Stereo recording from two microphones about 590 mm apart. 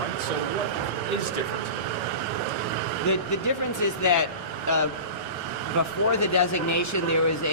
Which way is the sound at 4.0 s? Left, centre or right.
Left.